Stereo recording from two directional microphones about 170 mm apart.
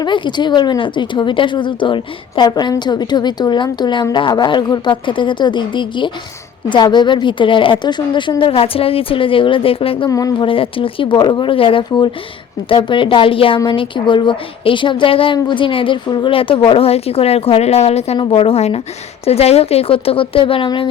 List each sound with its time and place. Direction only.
0.0 s a woman's voice: 25° left (ahead or behind)
10.1 s a woman's voice: 20° left (ahead or behind)